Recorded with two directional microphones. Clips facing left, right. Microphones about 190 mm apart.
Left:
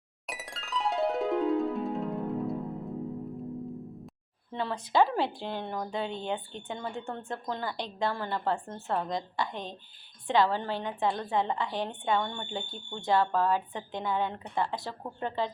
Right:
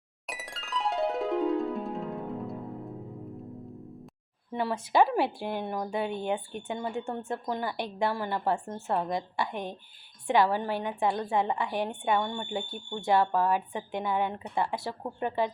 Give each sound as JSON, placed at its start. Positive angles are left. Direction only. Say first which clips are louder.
{"t": 0.3, "sound": "music", "louder": "even", "side_deg": 0}
{"t": 4.5, "sound": "a woman's voice", "louder": "right 2 dB", "side_deg": -10}